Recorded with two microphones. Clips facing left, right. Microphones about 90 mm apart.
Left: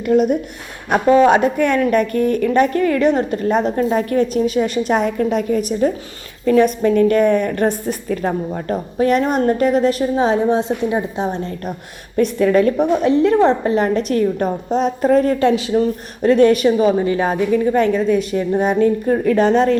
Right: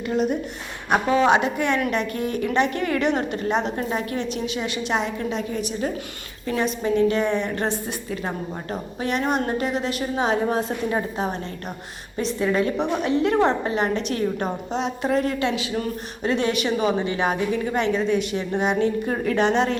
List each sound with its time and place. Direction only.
0.1 s a woman's voice: 50° left (ahead or behind); by 10.9 s 25° left (ahead or behind)
12.1 s a woman's voice: 60° left (ahead or behind)
12.8 s a woman's voice: 35° left (ahead or behind)
16.2 s a woman's voice: 45° left (ahead or behind)